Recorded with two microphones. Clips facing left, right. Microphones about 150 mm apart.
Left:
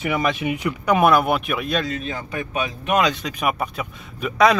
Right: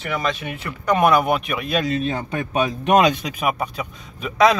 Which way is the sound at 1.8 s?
25° right (ahead or behind).